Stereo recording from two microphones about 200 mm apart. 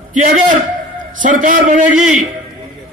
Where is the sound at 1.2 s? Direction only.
40° right (ahead or behind).